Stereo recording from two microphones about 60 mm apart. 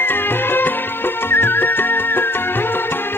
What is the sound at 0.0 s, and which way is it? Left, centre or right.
Music, left.